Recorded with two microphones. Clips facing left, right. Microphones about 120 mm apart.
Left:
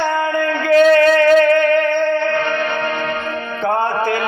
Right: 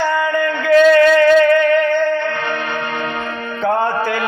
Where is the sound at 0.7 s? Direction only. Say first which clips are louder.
Right 1 dB; 30° left (ahead or behind).